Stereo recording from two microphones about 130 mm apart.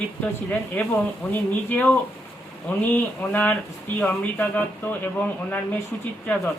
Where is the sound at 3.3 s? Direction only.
15° left (ahead or behind).